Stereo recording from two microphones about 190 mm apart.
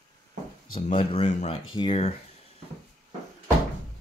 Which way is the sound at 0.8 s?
35° left (ahead or behind).